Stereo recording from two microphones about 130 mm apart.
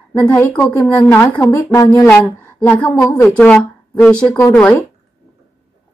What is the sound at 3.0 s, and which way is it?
Speech, 25° left (ahead or behind).